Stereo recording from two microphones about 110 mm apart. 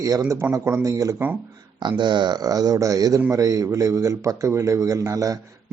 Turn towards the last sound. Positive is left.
turn(degrees=-30)  # may be behind; listen again after turning